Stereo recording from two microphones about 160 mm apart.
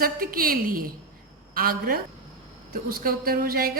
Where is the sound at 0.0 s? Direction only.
65° right (ahead or behind).